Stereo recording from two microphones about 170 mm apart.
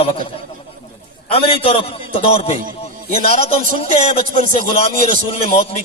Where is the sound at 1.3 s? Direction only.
35° left (ahead or behind).